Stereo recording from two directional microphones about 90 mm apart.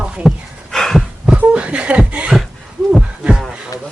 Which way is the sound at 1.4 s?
15° right (ahead or behind).